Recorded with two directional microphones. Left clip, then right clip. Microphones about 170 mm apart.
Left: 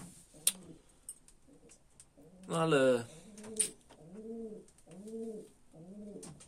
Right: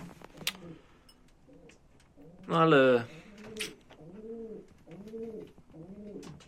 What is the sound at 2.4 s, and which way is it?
Pigeon, centre (ahead or behind).